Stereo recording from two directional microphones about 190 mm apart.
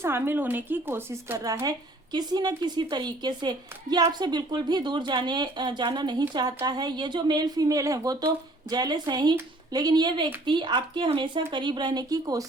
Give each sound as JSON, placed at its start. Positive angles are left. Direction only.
{"t": 0.0, "sound": "a woman's voice", "side_deg": -10}